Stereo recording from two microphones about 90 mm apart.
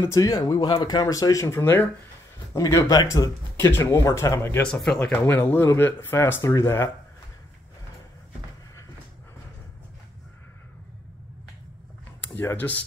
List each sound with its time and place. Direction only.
0.1 s speech: 45° left (ahead or behind); by 1.9 s 25° left (ahead or behind)
2.5 s speech: 35° left (ahead or behind)
4.8 s speech: 10° left (ahead or behind)
5.1 s speech: 20° left (ahead or behind)
12.2 s speech: 25° left (ahead or behind)